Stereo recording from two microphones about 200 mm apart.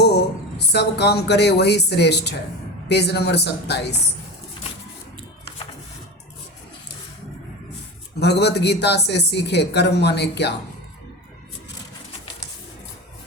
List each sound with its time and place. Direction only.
0.0 s speech: 55° left (ahead or behind)
8.2 s speech: 55° left (ahead or behind)